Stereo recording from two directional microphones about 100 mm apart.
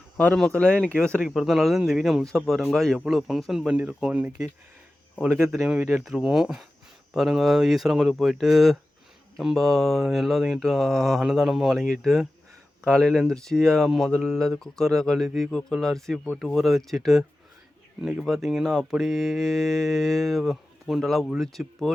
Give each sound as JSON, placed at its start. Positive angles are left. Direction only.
{"t": 0.3, "sound": "speech", "side_deg": 5}
{"t": 3.7, "sound": "speech", "side_deg": -15}
{"t": 5.3, "sound": "speech", "side_deg": 0}